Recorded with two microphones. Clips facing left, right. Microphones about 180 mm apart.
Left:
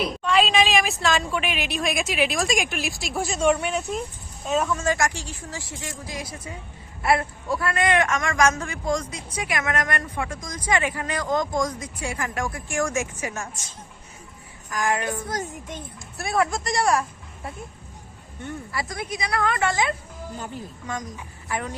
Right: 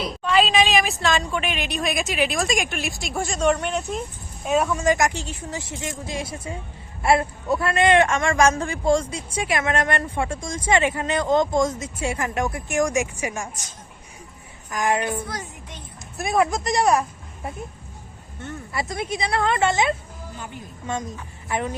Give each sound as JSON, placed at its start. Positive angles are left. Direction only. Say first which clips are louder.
{"t": 0.2, "sound": "a woman's voice", "louder": "right 2 dB", "side_deg": 0}
{"t": 4.4, "sound": "a man's voice", "louder": "right 3 dB", "side_deg": -15}
{"t": 14.7, "sound": "a man's voice", "louder": "right 2 dB", "side_deg": -20}
{"t": 15.3, "sound": "speech", "louder": "left 4 dB", "side_deg": 45}
{"t": 16.1, "sound": "speech", "louder": "right 3 dB", "side_deg": -20}
{"t": 18.7, "sound": "a man's voice", "louder": "right 6 dB", "side_deg": -25}